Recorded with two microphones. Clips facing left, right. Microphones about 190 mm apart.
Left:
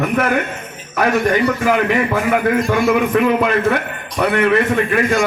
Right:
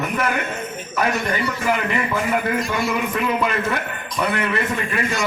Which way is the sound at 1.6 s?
55° left (ahead or behind).